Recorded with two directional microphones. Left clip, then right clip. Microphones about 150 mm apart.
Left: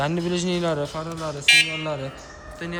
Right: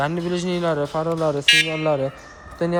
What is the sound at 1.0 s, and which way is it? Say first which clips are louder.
Speech: right 3 dB; 25° right (ahead or behind).